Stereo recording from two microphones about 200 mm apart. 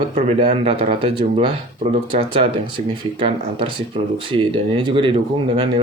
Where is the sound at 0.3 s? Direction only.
30° right (ahead or behind).